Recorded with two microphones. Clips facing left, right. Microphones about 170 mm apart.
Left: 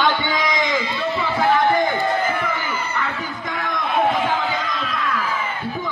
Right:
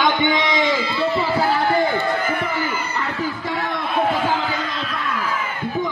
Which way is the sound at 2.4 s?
35° right (ahead or behind).